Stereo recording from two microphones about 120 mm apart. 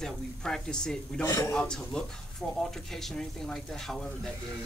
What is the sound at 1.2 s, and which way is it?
Speech, 25° left (ahead or behind).